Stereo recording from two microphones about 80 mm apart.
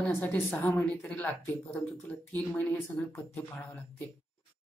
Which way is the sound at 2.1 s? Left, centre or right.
Centre.